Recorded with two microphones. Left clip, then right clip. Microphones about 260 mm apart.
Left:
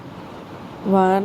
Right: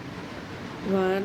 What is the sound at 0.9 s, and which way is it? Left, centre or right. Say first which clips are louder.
Speech: left 9 dB; left.